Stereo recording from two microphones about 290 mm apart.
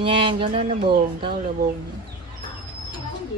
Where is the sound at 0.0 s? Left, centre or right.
Centre.